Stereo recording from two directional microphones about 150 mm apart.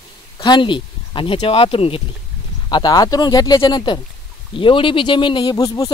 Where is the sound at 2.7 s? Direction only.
25° left (ahead or behind).